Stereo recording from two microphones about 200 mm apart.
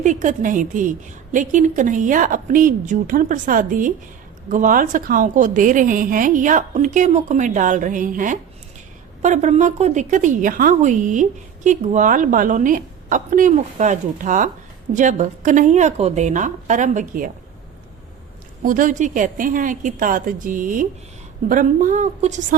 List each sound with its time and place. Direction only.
0.0 s a woman's voice: 40° right (ahead or behind)
18.6 s a woman's voice: 40° right (ahead or behind)